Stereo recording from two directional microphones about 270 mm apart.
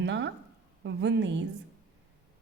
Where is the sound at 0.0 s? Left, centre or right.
Right.